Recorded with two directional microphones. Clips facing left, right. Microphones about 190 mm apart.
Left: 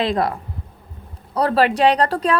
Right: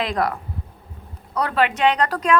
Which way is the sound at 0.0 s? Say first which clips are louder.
Left 3 dB; 30° left (ahead or behind).